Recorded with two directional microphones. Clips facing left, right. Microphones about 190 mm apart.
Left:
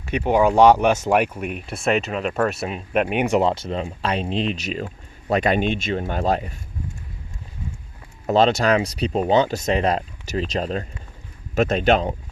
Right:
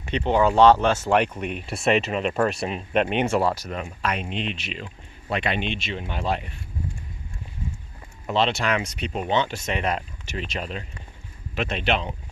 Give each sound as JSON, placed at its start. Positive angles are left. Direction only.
{"t": 0.1, "sound": "speech", "side_deg": 10}
{"t": 8.3, "sound": "speech", "side_deg": 40}